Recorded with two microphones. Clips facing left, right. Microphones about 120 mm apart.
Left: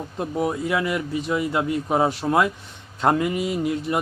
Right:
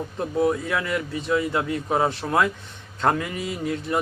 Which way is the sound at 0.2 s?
15° left (ahead or behind).